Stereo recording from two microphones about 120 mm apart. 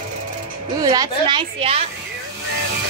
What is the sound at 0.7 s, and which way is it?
A woman's voice, 30° right (ahead or behind).